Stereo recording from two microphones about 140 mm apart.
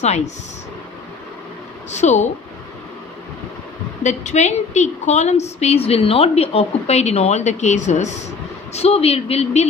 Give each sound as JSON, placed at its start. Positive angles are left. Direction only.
{"t": 1.9, "sound": "speech", "side_deg": 55}
{"t": 4.0, "sound": "a woman's voice", "side_deg": 55}
{"t": 8.7, "sound": "a woman's voice", "side_deg": 45}